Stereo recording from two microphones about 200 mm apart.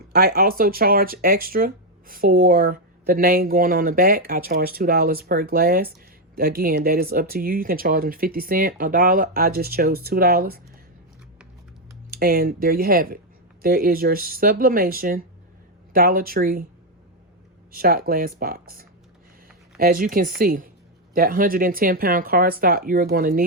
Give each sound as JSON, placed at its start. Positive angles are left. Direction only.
{"t": 0.1, "sound": "speech", "side_deg": -50}
{"t": 12.2, "sound": "speech", "side_deg": -50}
{"t": 17.7, "sound": "speech", "side_deg": -50}